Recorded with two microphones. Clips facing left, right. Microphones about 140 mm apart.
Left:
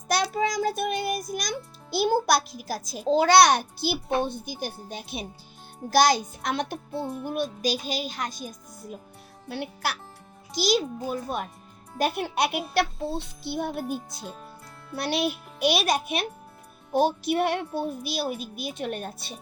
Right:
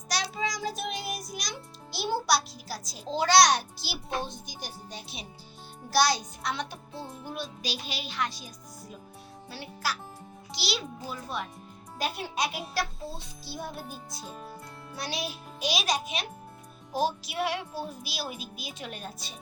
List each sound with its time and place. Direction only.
0.1 s music: 55° left (ahead or behind)
5.9 s a child's voice: 50° left (ahead or behind)
9.5 s a child's voice: 60° left (ahead or behind)
10.5 s a child's voice: 45° left (ahead or behind)